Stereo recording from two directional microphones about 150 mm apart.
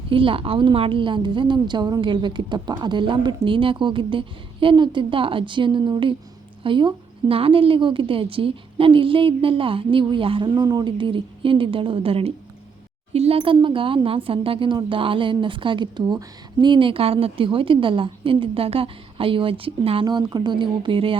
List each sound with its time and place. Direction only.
0.1 s speech: 35° right (ahead or behind)